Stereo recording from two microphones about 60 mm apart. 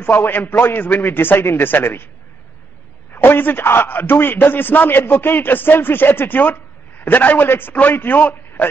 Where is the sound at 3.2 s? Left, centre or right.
Left.